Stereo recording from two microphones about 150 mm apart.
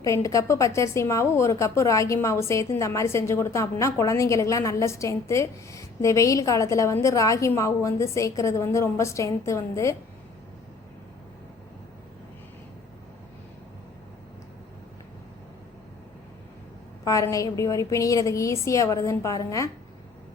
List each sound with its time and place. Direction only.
0.0 s a woman's voice: 20° left (ahead or behind)
17.0 s a woman's voice: 20° left (ahead or behind)